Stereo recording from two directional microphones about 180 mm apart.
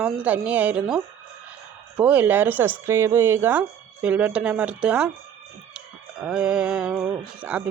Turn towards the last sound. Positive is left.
turn(degrees=-10)  # may be behind; listen again after turning